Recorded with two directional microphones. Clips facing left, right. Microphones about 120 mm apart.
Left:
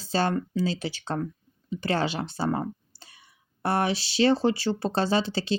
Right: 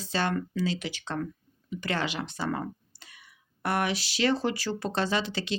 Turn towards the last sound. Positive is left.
turn(degrees=30)  # may be behind; listen again after turning